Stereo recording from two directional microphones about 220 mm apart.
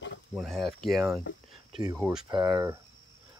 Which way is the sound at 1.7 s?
20° right (ahead or behind).